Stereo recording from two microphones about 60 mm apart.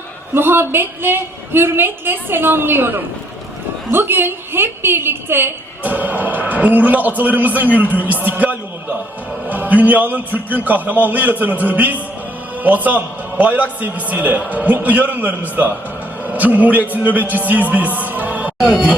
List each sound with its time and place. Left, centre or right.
0.3 s a woman's voice: right
5.8 s a man's voice: right
7.9 s music: right
9.5 s a man's voice: right
17.5 s music: right